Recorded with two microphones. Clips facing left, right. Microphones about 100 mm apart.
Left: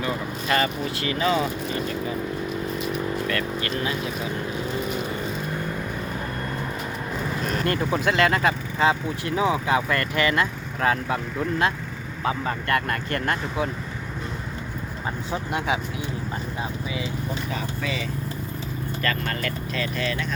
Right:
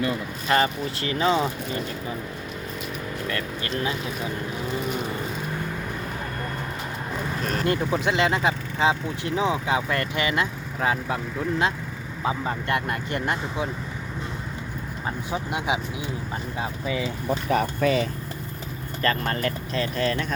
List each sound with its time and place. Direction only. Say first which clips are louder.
0.4 s speech: right 2 dB; 25° right (ahead or behind)
3.2 s speech: left 3 dB; 15° right (ahead or behind)
7.6 s speech: right 1 dB; 5° right (ahead or behind)
8.0 s speech: left 3 dB; 20° right (ahead or behind)
15.3 s speech: left 1 dB; 15° right (ahead or behind)
17.5 s speech: right 8 dB; 55° right (ahead or behind)
19.0 s speech: right 4 dB; 35° right (ahead or behind)